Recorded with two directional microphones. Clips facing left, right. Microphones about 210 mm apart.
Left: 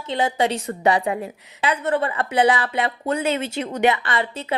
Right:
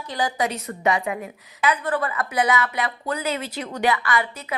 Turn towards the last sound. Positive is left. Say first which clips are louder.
# left 1 dB
turn(degrees=25)  # may be behind; listen again after turning